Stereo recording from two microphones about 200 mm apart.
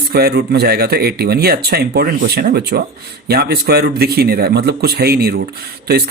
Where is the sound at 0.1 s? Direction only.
50° right (ahead or behind).